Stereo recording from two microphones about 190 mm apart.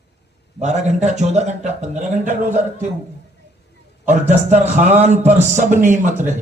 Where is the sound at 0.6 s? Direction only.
40° right (ahead or behind).